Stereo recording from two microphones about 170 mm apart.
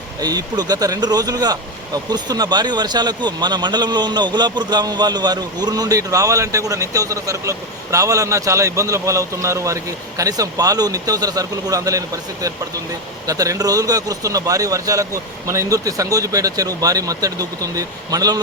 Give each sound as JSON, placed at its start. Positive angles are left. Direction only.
{"t": 0.2, "sound": "speech", "side_deg": -20}